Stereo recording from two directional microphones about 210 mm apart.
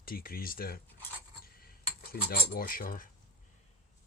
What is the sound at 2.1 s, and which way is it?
Cutlery, 45° left (ahead or behind).